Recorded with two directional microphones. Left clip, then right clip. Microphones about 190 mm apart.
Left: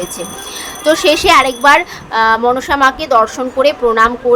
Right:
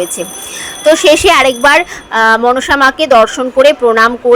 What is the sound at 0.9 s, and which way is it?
A woman's voice, 15° right (ahead or behind).